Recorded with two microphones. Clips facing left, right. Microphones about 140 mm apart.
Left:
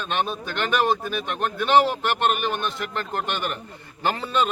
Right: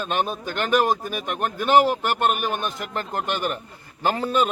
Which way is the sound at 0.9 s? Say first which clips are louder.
Even; 10° right (ahead or behind).